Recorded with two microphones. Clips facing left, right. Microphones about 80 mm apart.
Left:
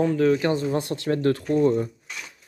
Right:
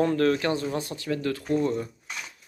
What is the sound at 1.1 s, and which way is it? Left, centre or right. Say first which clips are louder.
Speech: left 6 dB; left.